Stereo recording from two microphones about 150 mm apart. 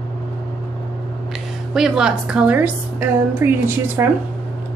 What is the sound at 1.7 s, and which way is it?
A woman's voice, 5° right (ahead or behind).